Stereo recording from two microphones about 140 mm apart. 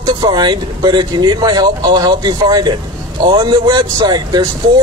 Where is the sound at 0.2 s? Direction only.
35° right (ahead or behind).